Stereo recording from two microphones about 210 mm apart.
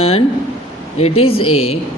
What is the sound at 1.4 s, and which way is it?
Speech, 90° left.